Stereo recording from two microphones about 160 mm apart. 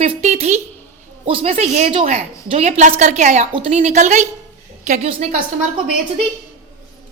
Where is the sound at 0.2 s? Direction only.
45° right (ahead or behind).